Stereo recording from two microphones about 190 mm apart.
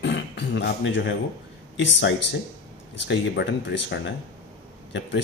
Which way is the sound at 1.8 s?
70° left (ahead or behind).